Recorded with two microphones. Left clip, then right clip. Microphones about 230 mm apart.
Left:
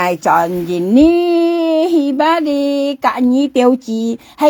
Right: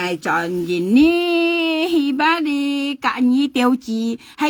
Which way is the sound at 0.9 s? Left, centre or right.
Right.